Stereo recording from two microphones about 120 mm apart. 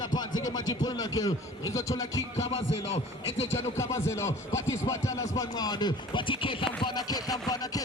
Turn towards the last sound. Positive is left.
turn(degrees=30)  # may be behind; listen again after turning